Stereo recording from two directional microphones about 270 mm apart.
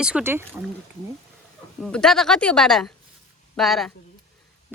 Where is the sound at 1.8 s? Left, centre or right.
Centre.